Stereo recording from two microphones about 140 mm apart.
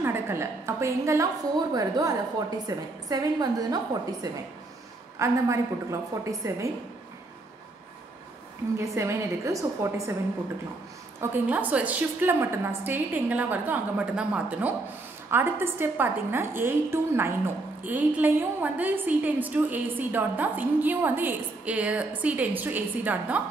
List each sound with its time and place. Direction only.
0.0 s a woman's voice: 20° right (ahead or behind)
8.7 s a woman's voice: 20° right (ahead or behind)
11.1 s a woman's voice: 15° right (ahead or behind)